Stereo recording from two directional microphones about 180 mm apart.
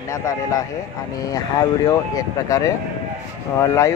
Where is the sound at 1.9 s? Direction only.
20° left (ahead or behind).